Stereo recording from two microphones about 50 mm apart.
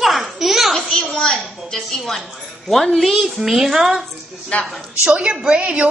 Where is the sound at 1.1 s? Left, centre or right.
Centre.